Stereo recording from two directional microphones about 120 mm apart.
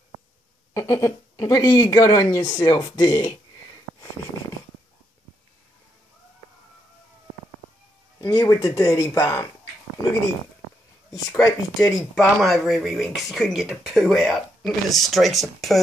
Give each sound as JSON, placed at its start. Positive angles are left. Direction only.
{"t": 0.7, "sound": "speech", "side_deg": 25}
{"t": 8.2, "sound": "speech", "side_deg": 30}
{"t": 11.1, "sound": "speech", "side_deg": 25}
{"t": 12.0, "sound": "speech", "side_deg": 0}